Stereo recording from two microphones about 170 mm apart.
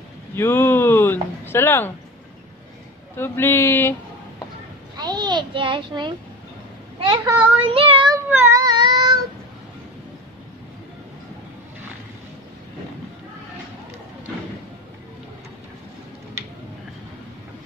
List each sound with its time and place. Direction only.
0.4 s speech: 15° left (ahead or behind)
3.2 s speech: 15° left (ahead or behind)
4.9 s a child's voice: 25° right (ahead or behind)
8.3 s cat: 15° right (ahead or behind)